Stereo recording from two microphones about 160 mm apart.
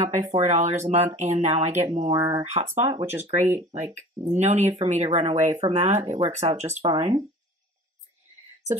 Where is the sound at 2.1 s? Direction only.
25° right (ahead or behind).